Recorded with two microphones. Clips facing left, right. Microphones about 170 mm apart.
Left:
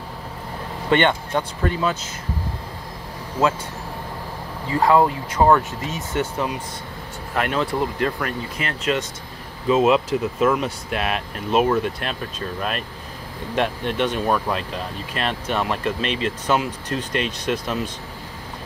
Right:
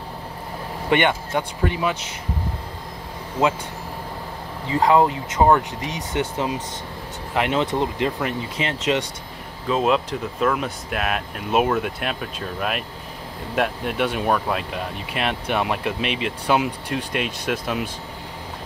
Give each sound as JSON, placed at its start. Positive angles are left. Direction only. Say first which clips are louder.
{"t": 0.8, "sound": "speech", "louder": "left 1 dB", "side_deg": -10}
{"t": 4.6, "sound": "speech", "louder": "even", "side_deg": -20}
{"t": 9.7, "sound": "speech", "louder": "left 3 dB", "side_deg": 5}